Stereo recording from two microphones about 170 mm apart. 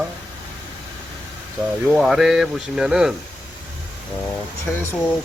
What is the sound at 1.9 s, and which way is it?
Speech, centre (ahead or behind).